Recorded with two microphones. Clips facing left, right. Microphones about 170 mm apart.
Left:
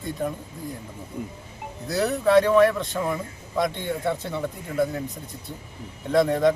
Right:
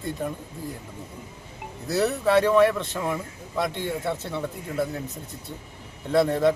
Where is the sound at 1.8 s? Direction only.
Centre (ahead or behind).